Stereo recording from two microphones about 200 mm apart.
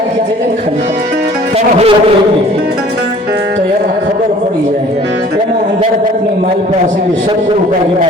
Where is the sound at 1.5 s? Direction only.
30° right (ahead or behind).